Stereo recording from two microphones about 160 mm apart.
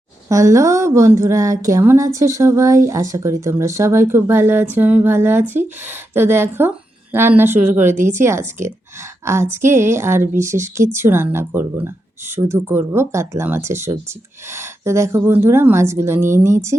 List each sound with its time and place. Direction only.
0.3 s a woman's voice: 20° right (ahead or behind)